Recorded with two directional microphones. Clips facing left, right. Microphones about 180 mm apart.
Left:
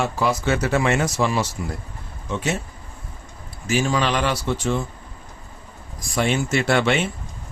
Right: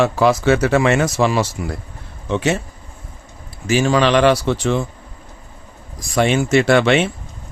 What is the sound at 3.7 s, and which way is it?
Speech, 85° right.